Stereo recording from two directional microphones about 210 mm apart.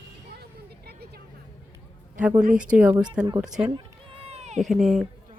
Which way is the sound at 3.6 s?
25° right (ahead or behind).